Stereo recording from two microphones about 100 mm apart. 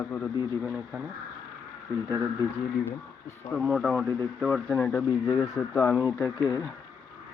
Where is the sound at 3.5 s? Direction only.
Centre (ahead or behind).